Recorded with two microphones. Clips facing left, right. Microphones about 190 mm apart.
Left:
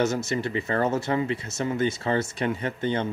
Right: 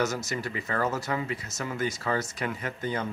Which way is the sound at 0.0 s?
25° left (ahead or behind).